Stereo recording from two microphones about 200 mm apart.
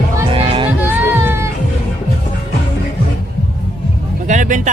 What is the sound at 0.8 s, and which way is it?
Music, 10° right (ahead or behind).